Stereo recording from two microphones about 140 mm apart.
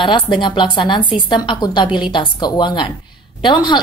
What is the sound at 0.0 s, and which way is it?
A woman's voice, 35° left (ahead or behind).